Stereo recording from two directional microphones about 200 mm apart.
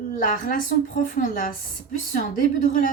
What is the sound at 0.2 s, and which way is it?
A woman's voice, 40° left (ahead or behind).